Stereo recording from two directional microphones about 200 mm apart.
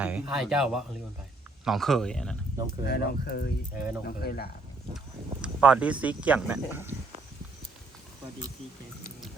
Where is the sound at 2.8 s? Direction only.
55° left (ahead or behind).